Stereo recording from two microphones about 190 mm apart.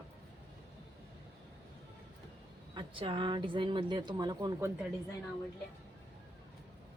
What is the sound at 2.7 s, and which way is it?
Speech, 25° right (ahead or behind).